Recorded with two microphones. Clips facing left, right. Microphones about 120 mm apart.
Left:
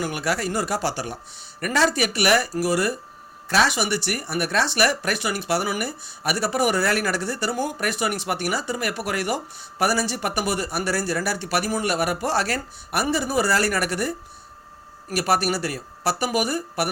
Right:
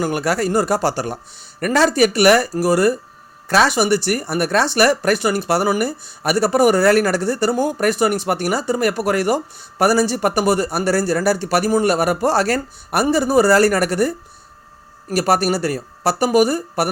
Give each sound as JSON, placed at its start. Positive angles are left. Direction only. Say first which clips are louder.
{"t": 0.0, "sound": "speech", "louder": "right 6 dB", "side_deg": -45}
{"t": 15.1, "sound": "speech", "louder": "right 5 dB", "side_deg": -40}